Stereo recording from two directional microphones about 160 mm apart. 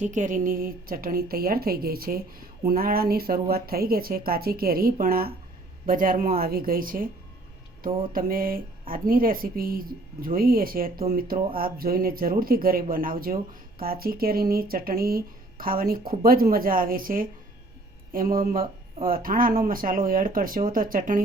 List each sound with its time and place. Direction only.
0.0 s a woman's voice: 50° right (ahead or behind)
8.1 s a woman's voice: 65° right (ahead or behind)